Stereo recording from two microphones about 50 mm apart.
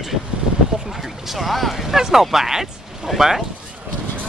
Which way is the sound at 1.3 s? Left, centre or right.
Centre.